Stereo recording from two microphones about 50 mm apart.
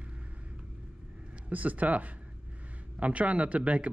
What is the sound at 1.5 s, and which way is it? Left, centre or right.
Speech, right.